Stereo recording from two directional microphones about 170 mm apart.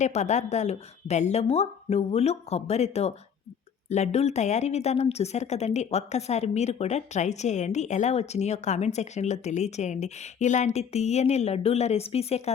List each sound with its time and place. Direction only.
0.0 s speech: 45° left (ahead or behind)